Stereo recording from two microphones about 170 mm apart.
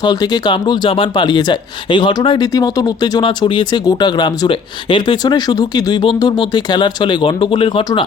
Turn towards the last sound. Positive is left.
turn(degrees=30)  # may be behind; listen again after turning